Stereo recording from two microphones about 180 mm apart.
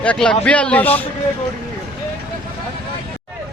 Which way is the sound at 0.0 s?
5° left (ahead or behind).